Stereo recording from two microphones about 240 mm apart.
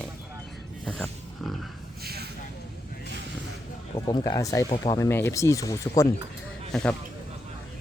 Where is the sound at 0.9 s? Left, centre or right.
Centre.